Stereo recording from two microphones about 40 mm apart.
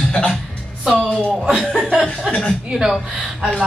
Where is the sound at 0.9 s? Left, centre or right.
Right.